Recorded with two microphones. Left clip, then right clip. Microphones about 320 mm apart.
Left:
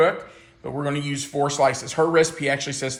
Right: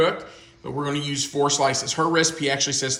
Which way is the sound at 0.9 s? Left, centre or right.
Left.